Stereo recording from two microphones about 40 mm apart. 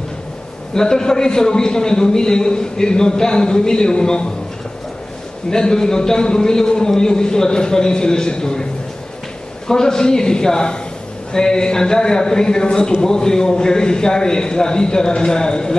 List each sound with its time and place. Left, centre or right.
0.7 s a man's voice: centre
5.5 s a man's voice: centre
9.7 s a man's voice: centre